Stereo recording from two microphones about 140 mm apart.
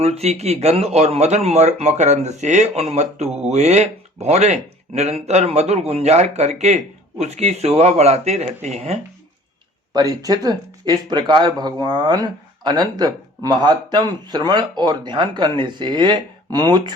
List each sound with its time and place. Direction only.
0.0 s speech: 50° right (ahead or behind)
9.9 s speech: 30° right (ahead or behind)